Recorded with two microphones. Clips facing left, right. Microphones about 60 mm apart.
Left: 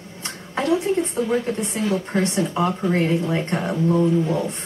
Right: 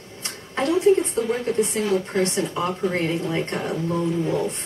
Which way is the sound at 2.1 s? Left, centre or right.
Centre.